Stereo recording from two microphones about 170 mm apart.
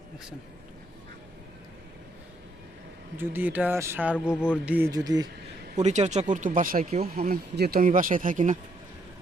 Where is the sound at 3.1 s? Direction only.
10° right (ahead or behind).